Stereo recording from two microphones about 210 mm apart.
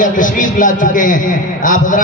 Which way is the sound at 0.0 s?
40° left (ahead or behind).